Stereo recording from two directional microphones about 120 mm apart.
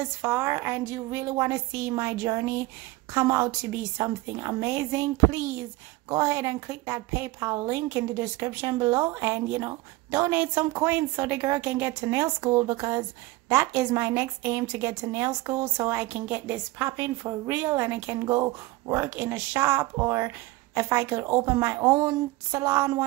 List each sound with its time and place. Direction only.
0.0 s a woman's voice: 20° right (ahead or behind)